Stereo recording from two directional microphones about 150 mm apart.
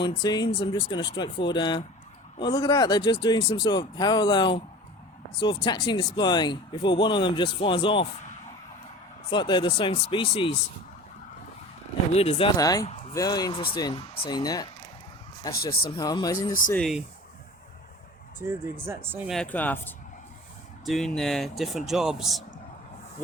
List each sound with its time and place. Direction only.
0.0 s speech: 30° left (ahead or behind)
9.3 s speech: 30° left (ahead or behind)
12.1 s speech: 45° left (ahead or behind)
12.5 s speech: 25° left (ahead or behind)
15.6 s speech: 90° left
16.0 s speech: 25° left (ahead or behind)
16.7 s speech: centre (ahead or behind)
18.3 s speech: 15° right (ahead or behind)
19.3 s speech: 10° left (ahead or behind)
20.8 s speech: centre (ahead or behind)